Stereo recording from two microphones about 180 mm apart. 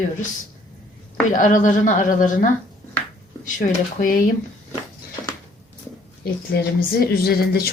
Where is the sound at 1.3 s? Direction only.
45° left (ahead or behind).